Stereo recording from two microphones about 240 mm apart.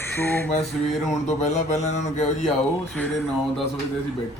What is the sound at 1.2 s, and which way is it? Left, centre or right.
Speech, left.